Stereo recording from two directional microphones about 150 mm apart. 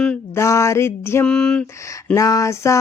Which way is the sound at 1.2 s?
5° left (ahead or behind).